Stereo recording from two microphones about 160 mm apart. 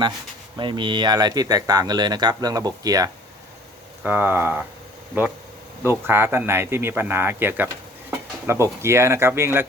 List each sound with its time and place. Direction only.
0.5 s speech: 30° right (ahead or behind)
4.0 s speech: 10° right (ahead or behind)